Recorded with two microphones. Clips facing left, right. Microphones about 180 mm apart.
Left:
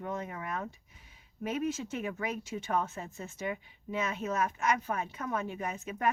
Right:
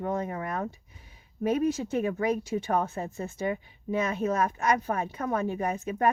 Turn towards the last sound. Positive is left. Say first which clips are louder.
# right 6 dB
turn(degrees=-35)  # may be behind; listen again after turning